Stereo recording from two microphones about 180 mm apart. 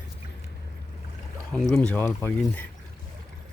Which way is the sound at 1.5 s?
5° left (ahead or behind).